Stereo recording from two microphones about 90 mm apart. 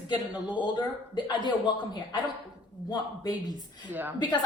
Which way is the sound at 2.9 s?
45° left (ahead or behind).